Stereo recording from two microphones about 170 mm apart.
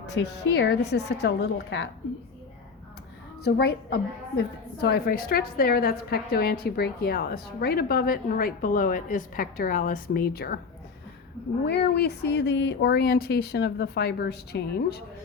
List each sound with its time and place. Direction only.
0.2 s speech: 75° left (ahead or behind)
3.4 s a woman's voice: 70° left (ahead or behind)
11.6 s speech: 75° left (ahead or behind)